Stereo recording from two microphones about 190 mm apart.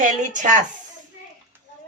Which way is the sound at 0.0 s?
40° right (ahead or behind).